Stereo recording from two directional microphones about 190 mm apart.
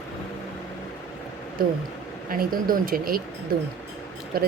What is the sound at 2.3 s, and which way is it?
Speech, 50° right (ahead or behind).